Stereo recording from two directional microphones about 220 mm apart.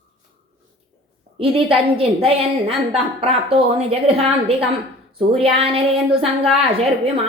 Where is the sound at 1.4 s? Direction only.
25° right (ahead or behind).